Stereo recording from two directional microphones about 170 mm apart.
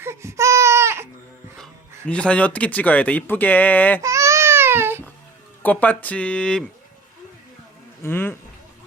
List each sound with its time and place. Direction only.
0.0 s baby cry: 15° right (ahead or behind)
1.5 s speech: 5° left (ahead or behind)
4.0 s baby cry: 15° right (ahead or behind)
5.6 s speech: 10° left (ahead or behind)
8.0 s speech: 15° left (ahead or behind)